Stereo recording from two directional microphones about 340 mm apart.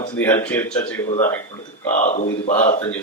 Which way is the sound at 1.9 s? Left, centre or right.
Left.